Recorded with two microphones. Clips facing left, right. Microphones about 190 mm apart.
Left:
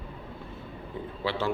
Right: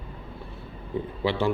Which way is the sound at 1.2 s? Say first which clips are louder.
Right 4 dB; 15° right (ahead or behind).